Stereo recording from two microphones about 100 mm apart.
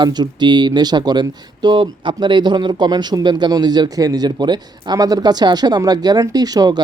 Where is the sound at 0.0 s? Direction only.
45° right (ahead or behind).